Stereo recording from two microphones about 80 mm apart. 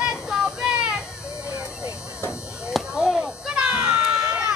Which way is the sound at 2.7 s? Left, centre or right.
Centre.